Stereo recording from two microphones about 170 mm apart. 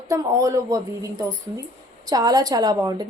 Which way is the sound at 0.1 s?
20° right (ahead or behind).